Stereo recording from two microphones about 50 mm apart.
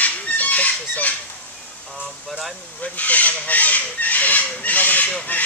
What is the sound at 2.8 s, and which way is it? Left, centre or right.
Speech, left.